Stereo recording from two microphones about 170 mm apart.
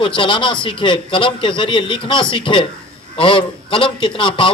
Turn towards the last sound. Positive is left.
turn(degrees=30)  # may be behind; listen again after turning